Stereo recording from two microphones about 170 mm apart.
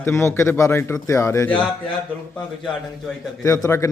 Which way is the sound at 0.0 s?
15° left (ahead or behind).